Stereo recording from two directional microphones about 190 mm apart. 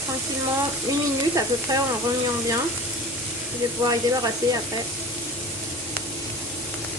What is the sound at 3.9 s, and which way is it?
Speech, 20° right (ahead or behind).